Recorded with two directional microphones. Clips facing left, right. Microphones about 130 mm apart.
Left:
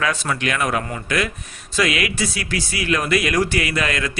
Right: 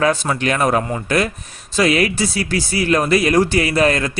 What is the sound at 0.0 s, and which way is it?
Speech, 35° right (ahead or behind).